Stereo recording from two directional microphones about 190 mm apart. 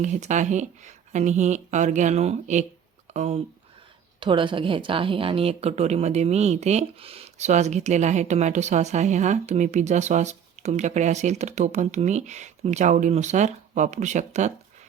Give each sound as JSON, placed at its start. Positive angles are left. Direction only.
{"t": 0.0, "sound": "a woman's voice", "side_deg": -40}